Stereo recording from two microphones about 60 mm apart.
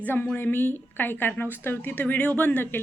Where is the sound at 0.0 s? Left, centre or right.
Left.